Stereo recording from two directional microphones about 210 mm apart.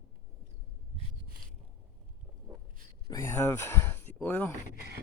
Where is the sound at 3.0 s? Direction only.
15° left (ahead or behind).